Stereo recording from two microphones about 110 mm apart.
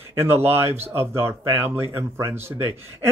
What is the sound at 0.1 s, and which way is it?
Speech, 20° right (ahead or behind).